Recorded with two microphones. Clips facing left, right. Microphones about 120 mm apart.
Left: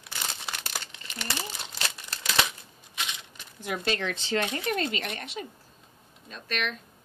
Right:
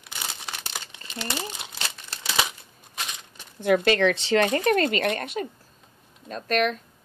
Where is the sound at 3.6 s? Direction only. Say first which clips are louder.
Right 10 dB; 70° right (ahead or behind).